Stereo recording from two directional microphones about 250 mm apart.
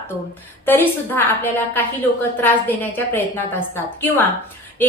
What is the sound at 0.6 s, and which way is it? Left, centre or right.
A woman's voice, centre.